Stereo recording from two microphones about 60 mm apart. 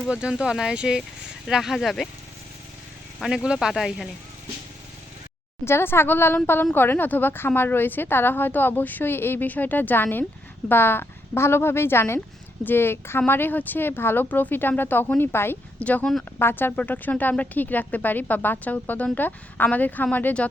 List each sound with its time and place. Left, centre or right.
0.1 s speech: centre
3.3 s speech: centre
5.6 s a woman's voice: left
15.8 s speech: left
16.4 s a woman's voice: left
16.7 s speech: left